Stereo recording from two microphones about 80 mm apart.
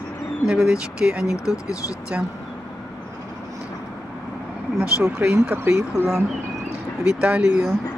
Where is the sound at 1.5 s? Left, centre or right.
Left.